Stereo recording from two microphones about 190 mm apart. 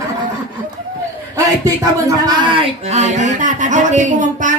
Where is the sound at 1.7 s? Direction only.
20° right (ahead or behind).